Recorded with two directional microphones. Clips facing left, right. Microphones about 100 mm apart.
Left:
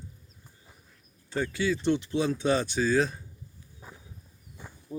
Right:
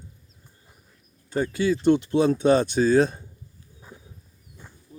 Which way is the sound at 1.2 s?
45° right (ahead or behind).